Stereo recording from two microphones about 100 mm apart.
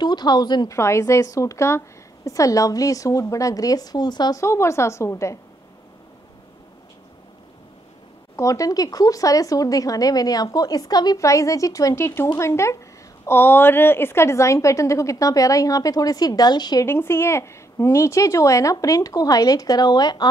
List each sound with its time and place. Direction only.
0.0 s speech: 45° left (ahead or behind)
0.7 s a woman's voice: 30° left (ahead or behind); by 4.4 s 45° left (ahead or behind)
4.4 s a woman's voice: 30° left (ahead or behind)
8.4 s a woman's voice: 35° left (ahead or behind)
16.8 s speech: 25° left (ahead or behind); by 20.2 s 45° left (ahead or behind)